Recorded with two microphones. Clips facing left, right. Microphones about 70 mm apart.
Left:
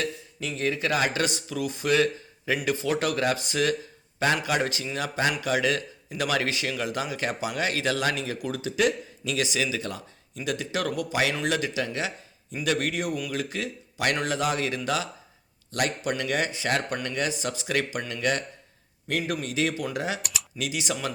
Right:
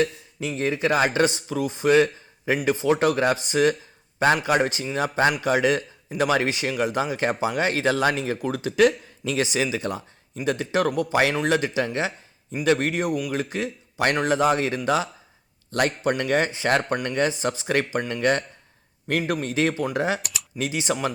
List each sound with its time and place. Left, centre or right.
0.0 s speech: right
9.3 s speech: right